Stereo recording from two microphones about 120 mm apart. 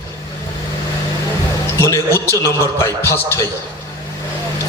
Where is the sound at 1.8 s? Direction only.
20° left (ahead or behind).